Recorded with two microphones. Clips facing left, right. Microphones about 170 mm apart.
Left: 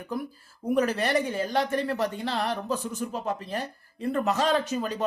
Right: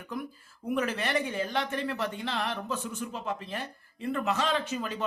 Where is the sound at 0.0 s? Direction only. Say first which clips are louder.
Left 4 dB; 35° left (ahead or behind).